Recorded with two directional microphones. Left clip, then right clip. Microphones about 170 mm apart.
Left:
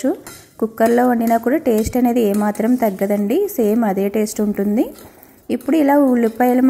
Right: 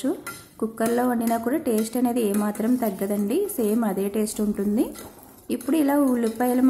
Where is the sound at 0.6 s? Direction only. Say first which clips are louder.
Left 9 dB; 30° left (ahead or behind).